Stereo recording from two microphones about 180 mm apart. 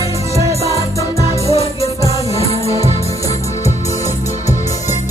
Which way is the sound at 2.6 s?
35° right (ahead or behind).